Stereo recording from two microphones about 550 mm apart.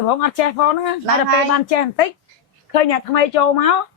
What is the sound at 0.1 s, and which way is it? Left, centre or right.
A woman's voice, left.